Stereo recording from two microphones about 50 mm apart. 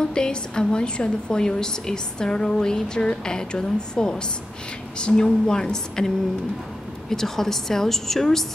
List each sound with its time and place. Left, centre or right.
0.0 s a woman's voice: centre